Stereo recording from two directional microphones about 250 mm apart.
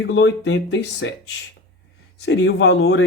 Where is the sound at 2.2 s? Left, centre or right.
Left.